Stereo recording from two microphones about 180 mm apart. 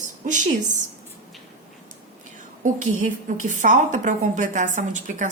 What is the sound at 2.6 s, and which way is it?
A woman's voice, 45° right (ahead or behind).